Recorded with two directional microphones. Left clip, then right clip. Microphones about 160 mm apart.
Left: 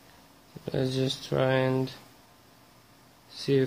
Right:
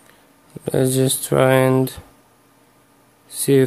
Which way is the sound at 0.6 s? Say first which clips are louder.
Right 11 dB; 60° right (ahead or behind).